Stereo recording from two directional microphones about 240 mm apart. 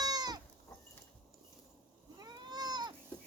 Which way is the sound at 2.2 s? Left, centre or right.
Centre.